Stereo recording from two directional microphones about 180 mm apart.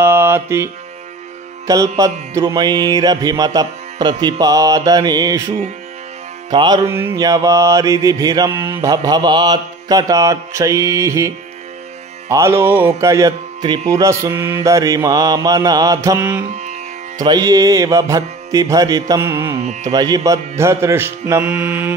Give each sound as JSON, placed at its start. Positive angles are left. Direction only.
{"t": 0.0, "sound": "mantra", "side_deg": -15}
{"t": 1.7, "sound": "mantra", "side_deg": -20}
{"t": 6.5, "sound": "mantra", "side_deg": -20}
{"t": 12.3, "sound": "music", "side_deg": -15}
{"t": 13.0, "sound": "mantra", "side_deg": -20}
{"t": 16.4, "sound": "music", "side_deg": -40}
{"t": 17.2, "sound": "mantra", "side_deg": -20}
{"t": 19.6, "sound": "carnatic music", "side_deg": -40}
{"t": 19.9, "sound": "music", "side_deg": -20}